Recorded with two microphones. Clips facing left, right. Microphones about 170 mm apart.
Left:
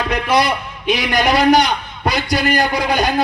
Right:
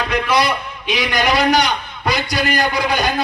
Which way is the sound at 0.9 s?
55° left (ahead or behind).